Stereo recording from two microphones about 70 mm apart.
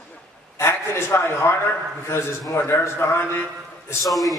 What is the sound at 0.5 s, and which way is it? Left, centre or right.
Speech, left.